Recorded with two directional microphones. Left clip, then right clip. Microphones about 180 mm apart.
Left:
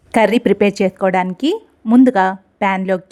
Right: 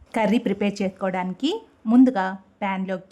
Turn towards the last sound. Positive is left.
turn(degrees=35)  # may be behind; listen again after turning